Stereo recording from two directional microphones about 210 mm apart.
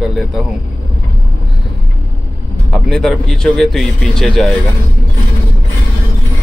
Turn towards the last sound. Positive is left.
turn(degrees=0)  # may be behind; listen again after turning